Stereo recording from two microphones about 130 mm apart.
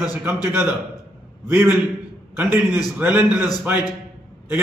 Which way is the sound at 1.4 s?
15° right (ahead or behind).